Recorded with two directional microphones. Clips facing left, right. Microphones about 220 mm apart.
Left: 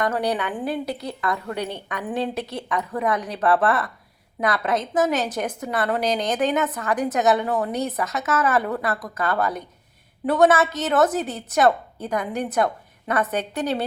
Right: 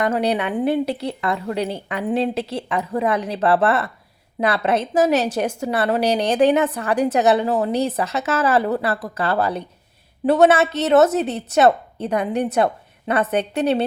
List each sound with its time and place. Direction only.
0.0 s a woman's voice: 25° right (ahead or behind)